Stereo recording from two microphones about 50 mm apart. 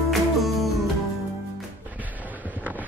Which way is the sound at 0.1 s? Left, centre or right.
Centre.